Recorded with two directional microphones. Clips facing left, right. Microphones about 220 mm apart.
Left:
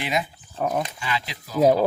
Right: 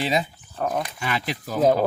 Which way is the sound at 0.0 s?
30° right (ahead or behind).